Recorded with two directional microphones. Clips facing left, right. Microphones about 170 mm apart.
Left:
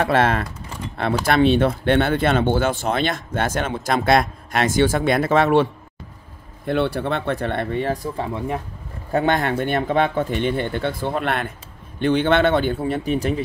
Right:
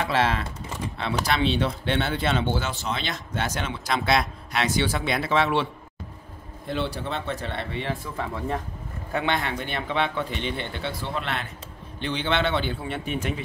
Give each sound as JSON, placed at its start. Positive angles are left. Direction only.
{"t": 0.0, "sound": "speech", "side_deg": 55}
{"t": 6.6, "sound": "speech", "side_deg": 60}
{"t": 8.3, "sound": "speech", "side_deg": 15}
{"t": 9.1, "sound": "speech", "side_deg": 45}